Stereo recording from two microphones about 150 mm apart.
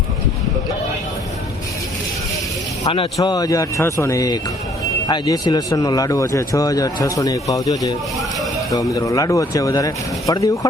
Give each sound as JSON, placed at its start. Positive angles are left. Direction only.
{"t": 3.2, "sound": "speech", "side_deg": 25}